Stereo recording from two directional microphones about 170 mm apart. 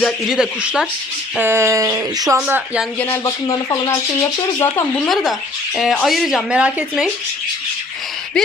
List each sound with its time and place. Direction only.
0.0 s speech: 5° right (ahead or behind)
3.0 s speech: 15° left (ahead or behind)
5.0 s speech: centre (ahead or behind)
8.4 s speech: 5° left (ahead or behind)